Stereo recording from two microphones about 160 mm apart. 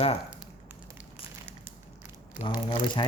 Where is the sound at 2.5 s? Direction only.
30° left (ahead or behind).